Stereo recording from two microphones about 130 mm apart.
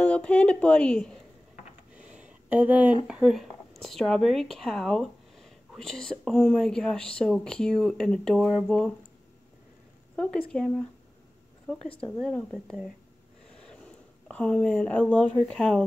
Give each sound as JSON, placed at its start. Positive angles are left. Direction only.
{"t": 0.0, "sound": "a woman's voice", "side_deg": 10}
{"t": 2.0, "sound": "a sound", "side_deg": -10}
{"t": 3.1, "sound": "speech", "side_deg": -5}
{"t": 10.1, "sound": "a woman's voice", "side_deg": 10}
{"t": 13.7, "sound": "speech", "side_deg": 5}